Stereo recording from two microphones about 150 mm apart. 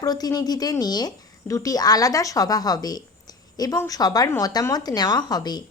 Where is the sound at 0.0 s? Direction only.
25° left (ahead or behind).